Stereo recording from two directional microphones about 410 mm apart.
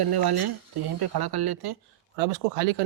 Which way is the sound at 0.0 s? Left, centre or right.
Right.